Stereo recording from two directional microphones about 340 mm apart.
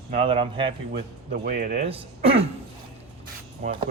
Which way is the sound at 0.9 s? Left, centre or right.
Right.